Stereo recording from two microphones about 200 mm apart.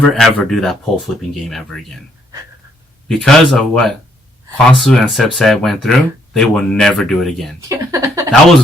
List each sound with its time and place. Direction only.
0.0 s speech: centre (ahead or behind)
3.1 s speech: centre (ahead or behind)
7.7 s speech: 15° right (ahead or behind)